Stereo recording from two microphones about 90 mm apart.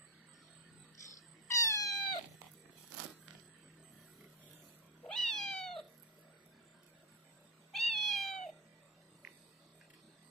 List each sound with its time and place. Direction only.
1.5 s cat: 35° left (ahead or behind)
5.0 s cat: 10° left (ahead or behind)
7.7 s cat: 5° left (ahead or behind)